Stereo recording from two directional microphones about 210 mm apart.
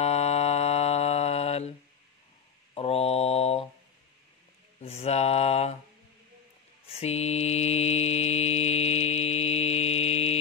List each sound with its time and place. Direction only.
0.0 s mantra: 30° left (ahead or behind)
2.7 s mantra: 30° left (ahead or behind)
4.7 s mantra: 30° left (ahead or behind)
6.9 s mantra: 30° left (ahead or behind)